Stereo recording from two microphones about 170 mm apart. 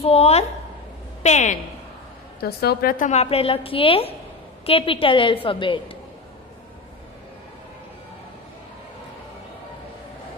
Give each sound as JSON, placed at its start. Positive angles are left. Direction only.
{"t": 0.0, "sound": "a woman's voice", "side_deg": 35}
{"t": 2.4, "sound": "a woman's voice", "side_deg": 65}
{"t": 3.1, "sound": "a woman's voice", "side_deg": 40}